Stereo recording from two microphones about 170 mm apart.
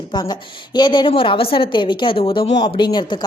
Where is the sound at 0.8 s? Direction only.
25° left (ahead or behind).